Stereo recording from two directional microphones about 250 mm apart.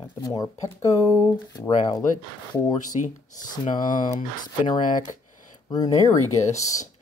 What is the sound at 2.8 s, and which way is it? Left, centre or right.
Speech, left.